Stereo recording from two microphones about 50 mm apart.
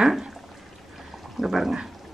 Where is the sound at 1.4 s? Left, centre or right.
Centre.